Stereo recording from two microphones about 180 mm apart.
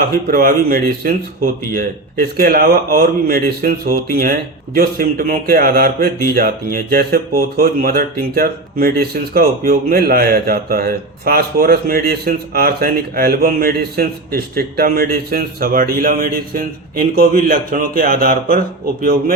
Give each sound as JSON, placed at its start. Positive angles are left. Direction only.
{"t": 0.0, "sound": "a man's voice", "side_deg": -55}